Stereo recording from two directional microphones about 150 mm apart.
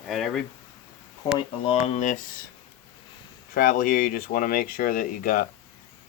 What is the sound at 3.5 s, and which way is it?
Speech, 65° left (ahead or behind).